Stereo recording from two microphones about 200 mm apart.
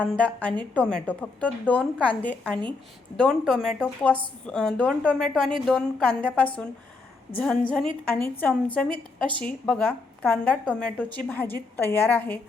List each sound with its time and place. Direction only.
0.0 s a woman's voice: 5° left (ahead or behind)
8.0 s a woman's voice: 5° left (ahead or behind)